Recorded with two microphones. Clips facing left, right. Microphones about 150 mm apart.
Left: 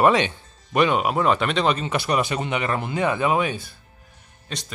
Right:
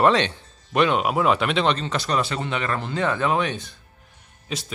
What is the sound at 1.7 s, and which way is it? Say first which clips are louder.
Speech: left 1 dB; 10° left (ahead or behind).